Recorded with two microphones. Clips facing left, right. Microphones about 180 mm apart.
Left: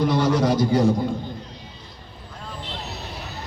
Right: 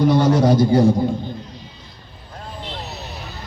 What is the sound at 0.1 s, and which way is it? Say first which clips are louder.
Speech: right 5 dB; 30° right (ahead or behind).